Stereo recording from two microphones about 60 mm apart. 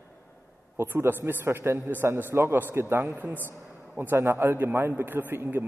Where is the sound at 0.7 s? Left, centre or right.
Right.